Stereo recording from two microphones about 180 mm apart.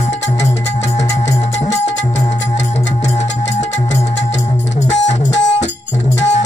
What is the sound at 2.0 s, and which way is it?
Music, 40° left (ahead or behind).